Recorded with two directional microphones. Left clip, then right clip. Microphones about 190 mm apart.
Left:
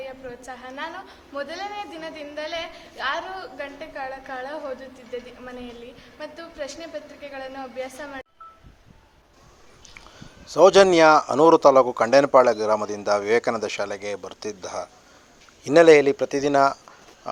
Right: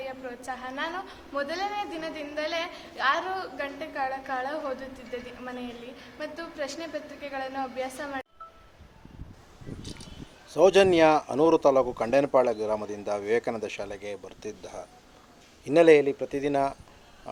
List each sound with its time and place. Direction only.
0.0 s a woman's voice: 5° left (ahead or behind)
10.5 s a woman's voice: 15° left (ahead or behind)